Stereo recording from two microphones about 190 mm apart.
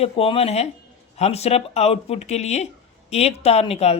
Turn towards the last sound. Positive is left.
turn(degrees=35)  # may be behind; listen again after turning